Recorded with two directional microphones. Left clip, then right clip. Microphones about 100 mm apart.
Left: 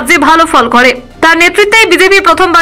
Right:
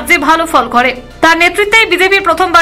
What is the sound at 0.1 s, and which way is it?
A woman's voice, 35° left (ahead or behind).